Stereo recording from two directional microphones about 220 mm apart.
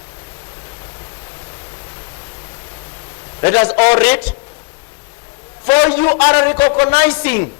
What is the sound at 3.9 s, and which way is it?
Speech, 10° left (ahead or behind).